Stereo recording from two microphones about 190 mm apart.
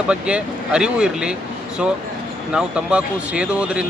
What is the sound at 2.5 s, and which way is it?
Speech, 5° right (ahead or behind).